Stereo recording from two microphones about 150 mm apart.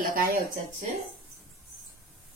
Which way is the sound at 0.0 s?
75° right (ahead or behind).